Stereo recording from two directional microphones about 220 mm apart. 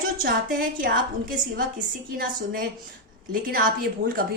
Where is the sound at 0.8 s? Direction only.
40° right (ahead or behind).